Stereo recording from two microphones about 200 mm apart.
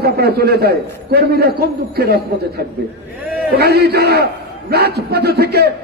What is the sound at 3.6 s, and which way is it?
A man's voice, 50° right (ahead or behind).